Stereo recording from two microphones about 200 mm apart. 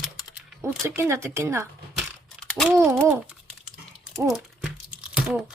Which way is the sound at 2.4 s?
Centre (ahead or behind).